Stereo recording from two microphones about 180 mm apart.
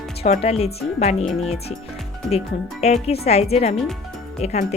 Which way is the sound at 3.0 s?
35° left (ahead or behind).